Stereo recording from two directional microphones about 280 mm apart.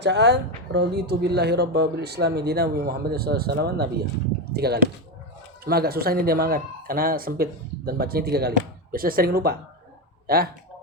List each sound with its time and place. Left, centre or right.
0.0 s speech: right